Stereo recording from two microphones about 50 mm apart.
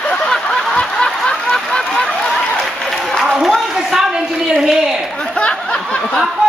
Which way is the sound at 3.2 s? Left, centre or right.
Centre.